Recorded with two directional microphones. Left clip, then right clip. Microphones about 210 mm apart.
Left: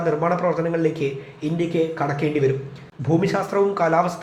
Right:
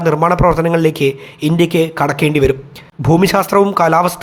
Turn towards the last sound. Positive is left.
turn(degrees=-40)  # may be behind; listen again after turning